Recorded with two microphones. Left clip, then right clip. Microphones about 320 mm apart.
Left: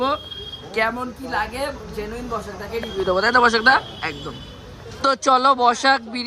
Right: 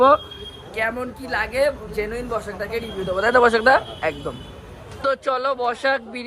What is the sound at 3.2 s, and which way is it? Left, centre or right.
Speech, centre.